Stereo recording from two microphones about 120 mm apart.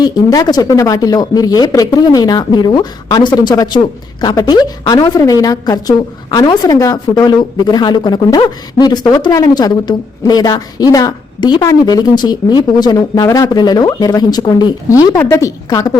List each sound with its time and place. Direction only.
0.0 s a woman's voice: 35° left (ahead or behind)